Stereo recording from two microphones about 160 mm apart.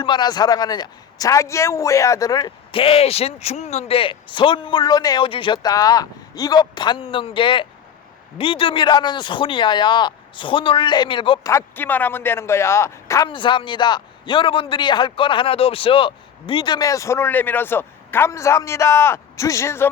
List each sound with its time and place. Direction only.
0.0 s a man's voice: 30° left (ahead or behind)
2.8 s a man's voice: 40° left (ahead or behind)
11.5 s speech: 10° left (ahead or behind)
13.2 s a man's voice: 30° left (ahead or behind)